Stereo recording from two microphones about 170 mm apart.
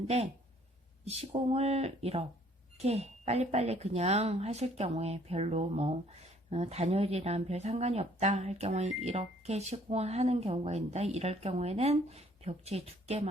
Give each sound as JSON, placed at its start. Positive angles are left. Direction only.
{"t": 1.0, "sound": "speech", "side_deg": -35}